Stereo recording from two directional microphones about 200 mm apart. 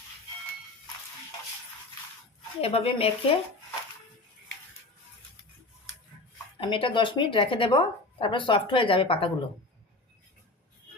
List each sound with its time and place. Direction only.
2.6 s a woman's voice: 30° left (ahead or behind)
6.6 s a woman's voice: 25° left (ahead or behind)